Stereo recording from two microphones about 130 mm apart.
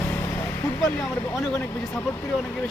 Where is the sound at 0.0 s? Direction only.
20° left (ahead or behind).